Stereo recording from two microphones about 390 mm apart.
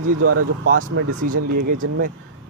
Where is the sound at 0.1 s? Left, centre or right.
Right.